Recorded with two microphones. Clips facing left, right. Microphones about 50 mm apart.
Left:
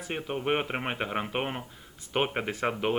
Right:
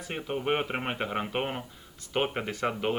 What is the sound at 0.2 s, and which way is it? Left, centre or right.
Speech, centre.